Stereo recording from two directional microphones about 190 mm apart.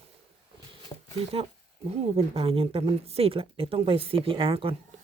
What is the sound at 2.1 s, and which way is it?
Speech, 30° right (ahead or behind).